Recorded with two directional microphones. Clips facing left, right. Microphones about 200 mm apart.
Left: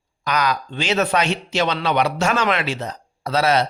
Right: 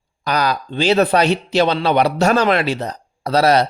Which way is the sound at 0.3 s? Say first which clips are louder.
Right 2 dB; 35° right (ahead or behind).